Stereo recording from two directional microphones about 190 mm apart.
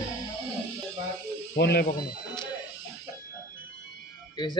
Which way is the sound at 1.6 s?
55° left (ahead or behind).